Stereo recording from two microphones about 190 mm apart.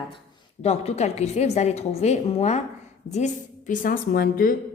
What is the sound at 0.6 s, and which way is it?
A woman's voice, 35° left (ahead or behind).